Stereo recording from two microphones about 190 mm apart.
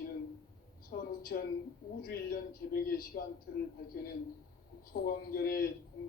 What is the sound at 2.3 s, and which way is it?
Speech, 50° left (ahead or behind).